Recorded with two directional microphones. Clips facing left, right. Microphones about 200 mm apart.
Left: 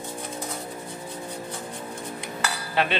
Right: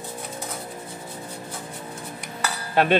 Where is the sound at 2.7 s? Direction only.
45° right (ahead or behind).